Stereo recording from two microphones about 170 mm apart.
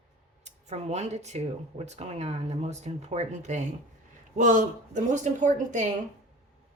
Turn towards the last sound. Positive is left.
turn(degrees=-45)  # may be behind; listen again after turning